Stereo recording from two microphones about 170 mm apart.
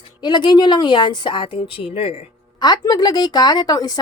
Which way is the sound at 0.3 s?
25° left (ahead or behind).